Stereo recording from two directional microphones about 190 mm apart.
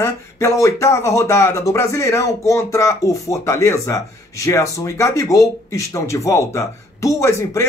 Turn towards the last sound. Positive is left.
turn(degrees=15)  # may be behind; listen again after turning